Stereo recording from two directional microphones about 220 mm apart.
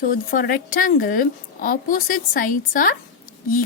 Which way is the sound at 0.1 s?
40° left (ahead or behind).